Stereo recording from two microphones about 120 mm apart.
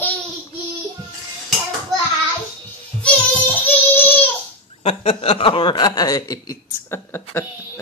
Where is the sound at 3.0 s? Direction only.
15° left (ahead or behind).